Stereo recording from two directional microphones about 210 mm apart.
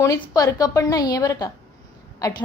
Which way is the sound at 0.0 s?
15° left (ahead or behind).